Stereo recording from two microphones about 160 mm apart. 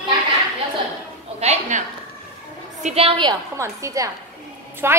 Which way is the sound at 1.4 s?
45° right (ahead or behind).